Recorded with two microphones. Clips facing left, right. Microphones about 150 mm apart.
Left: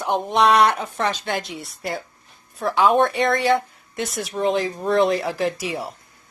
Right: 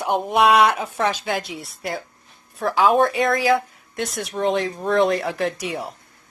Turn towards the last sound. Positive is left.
turn(degrees=0)  # may be behind; listen again after turning